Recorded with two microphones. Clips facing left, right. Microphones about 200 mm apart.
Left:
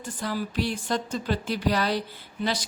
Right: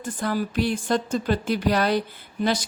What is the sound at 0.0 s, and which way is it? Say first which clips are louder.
Speech: right 4 dB; 50° right (ahead or behind).